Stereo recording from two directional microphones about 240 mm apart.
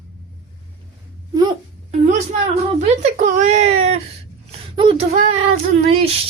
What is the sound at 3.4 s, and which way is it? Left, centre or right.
Speech, right.